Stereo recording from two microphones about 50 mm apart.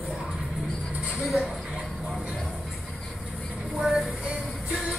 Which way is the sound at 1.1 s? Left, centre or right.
Centre.